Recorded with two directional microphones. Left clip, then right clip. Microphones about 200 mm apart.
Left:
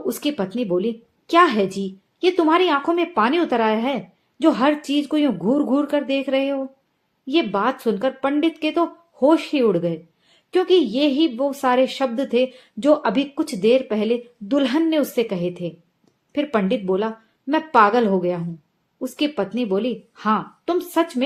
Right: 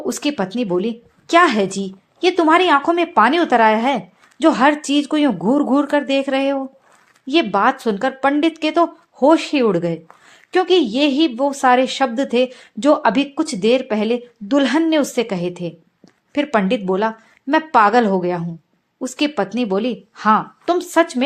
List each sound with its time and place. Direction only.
0.0 s a woman's voice: 20° right (ahead or behind)